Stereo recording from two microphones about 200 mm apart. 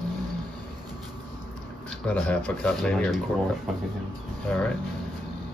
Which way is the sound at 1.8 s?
5° left (ahead or behind).